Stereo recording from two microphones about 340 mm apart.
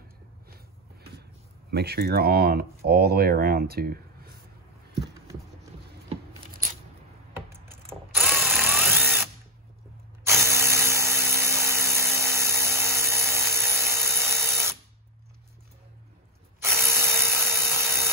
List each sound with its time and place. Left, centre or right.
1.7 s speech: right
6.0 s a sound: right
7.6 s drill: centre
16.5 s drill: centre